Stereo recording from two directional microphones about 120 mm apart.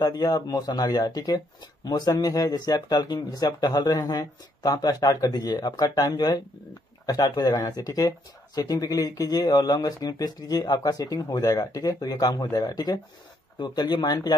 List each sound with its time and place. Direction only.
0.0 s speech: 30° left (ahead or behind)